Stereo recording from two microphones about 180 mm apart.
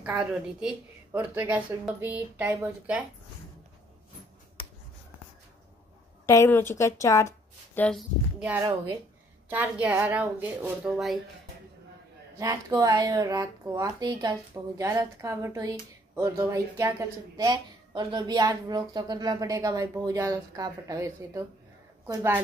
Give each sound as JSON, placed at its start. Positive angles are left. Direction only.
{"t": 0.0, "sound": "a woman's voice", "side_deg": -5}
{"t": 6.2, "sound": "speech", "side_deg": 15}
{"t": 9.5, "sound": "a woman's voice", "side_deg": -10}
{"t": 12.4, "sound": "speech", "side_deg": -20}